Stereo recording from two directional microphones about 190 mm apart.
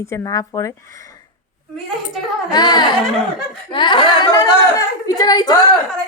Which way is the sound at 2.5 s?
20° left (ahead or behind).